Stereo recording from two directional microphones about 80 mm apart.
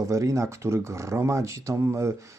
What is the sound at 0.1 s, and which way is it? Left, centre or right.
Speech, right.